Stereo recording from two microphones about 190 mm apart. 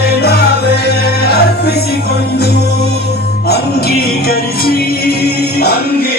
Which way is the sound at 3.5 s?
55° left (ahead or behind).